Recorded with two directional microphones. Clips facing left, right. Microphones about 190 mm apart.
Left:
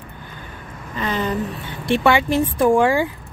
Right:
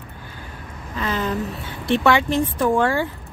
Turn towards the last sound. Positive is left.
turn(degrees=15)  # may be behind; listen again after turning